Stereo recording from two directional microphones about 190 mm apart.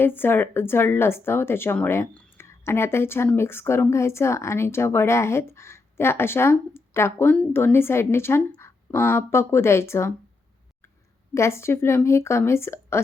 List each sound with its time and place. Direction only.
0.0 s speech: 10° left (ahead or behind)
11.3 s speech: 15° left (ahead or behind)